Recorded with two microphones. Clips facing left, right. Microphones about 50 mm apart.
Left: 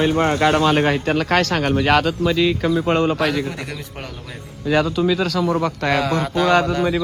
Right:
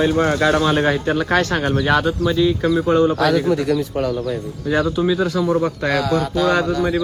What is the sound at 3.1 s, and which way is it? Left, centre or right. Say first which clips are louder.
Speech: right 5 dB; left.